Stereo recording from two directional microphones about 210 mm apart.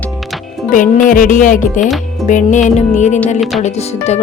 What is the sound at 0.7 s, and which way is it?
Speech, 40° left (ahead or behind).